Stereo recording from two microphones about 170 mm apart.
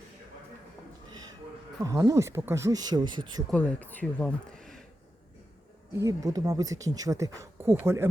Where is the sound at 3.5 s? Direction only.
10° left (ahead or behind).